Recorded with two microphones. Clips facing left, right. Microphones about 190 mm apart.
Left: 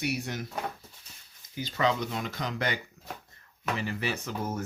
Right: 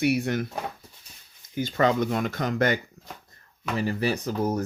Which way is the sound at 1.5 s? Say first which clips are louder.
Right 6 dB; 50° right (ahead or behind).